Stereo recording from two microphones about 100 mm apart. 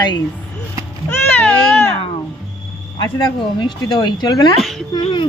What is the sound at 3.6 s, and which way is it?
Speech, 50° left (ahead or behind).